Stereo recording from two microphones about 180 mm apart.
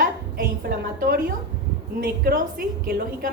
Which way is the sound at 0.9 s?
55° right (ahead or behind).